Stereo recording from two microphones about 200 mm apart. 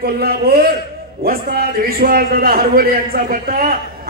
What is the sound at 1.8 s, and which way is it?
A man's voice, 50° right (ahead or behind).